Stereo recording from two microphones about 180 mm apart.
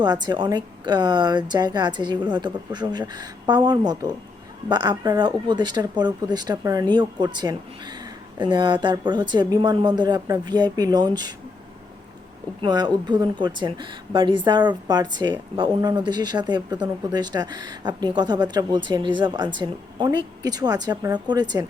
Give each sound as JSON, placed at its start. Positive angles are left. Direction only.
{"t": 0.0, "sound": "a woman's voice", "side_deg": -25}
{"t": 12.6, "sound": "a woman's voice", "side_deg": -20}